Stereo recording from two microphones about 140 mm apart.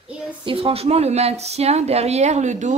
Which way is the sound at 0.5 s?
45° right (ahead or behind).